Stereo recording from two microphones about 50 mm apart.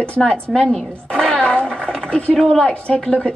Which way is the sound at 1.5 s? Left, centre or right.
Centre.